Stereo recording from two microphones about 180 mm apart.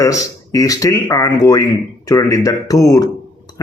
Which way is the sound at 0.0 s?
20° left (ahead or behind).